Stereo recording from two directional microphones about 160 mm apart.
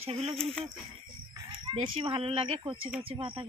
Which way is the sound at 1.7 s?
35° right (ahead or behind).